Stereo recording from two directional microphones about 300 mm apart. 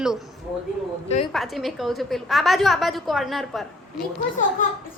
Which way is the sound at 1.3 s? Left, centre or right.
Centre.